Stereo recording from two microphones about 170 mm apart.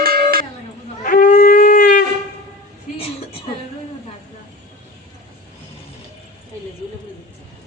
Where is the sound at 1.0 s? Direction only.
50° left (ahead or behind).